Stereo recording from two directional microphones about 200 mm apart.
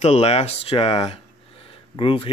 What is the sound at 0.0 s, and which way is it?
Speech, 30° left (ahead or behind).